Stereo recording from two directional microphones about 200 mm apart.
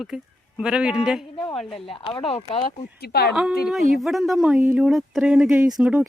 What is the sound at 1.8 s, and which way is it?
Speech, 25° left (ahead or behind).